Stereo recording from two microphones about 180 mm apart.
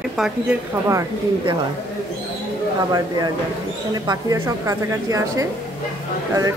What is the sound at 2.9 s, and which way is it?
A woman's voice, 20° right (ahead or behind).